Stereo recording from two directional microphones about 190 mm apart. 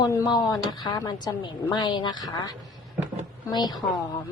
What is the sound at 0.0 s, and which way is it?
A woman's voice, 20° left (ahead or behind).